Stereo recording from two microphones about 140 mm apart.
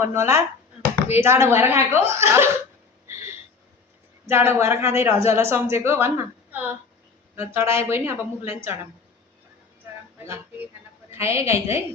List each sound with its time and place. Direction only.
0.0 s speech: 20° right (ahead or behind)
4.3 s speech: 15° right (ahead or behind)
11.2 s a woman's voice: 20° right (ahead or behind)